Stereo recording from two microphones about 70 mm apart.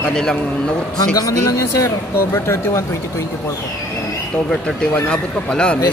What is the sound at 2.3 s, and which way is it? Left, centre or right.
Speech, left.